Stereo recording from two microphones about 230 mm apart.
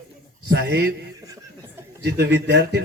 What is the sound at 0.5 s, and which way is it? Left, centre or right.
Speech, right.